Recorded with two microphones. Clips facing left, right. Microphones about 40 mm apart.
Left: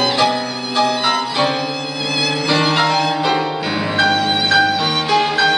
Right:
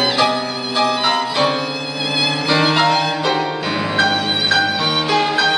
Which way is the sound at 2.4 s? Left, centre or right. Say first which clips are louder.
Right 1 dB; centre.